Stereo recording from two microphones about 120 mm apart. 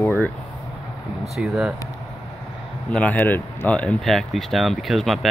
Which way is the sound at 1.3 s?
5° right (ahead or behind).